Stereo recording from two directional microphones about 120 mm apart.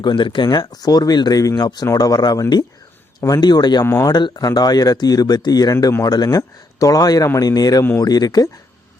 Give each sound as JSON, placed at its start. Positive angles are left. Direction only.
{"t": 0.0, "sound": "speech", "side_deg": 40}
{"t": 3.8, "sound": "speech", "side_deg": 20}
{"t": 4.1, "sound": "speech", "side_deg": 35}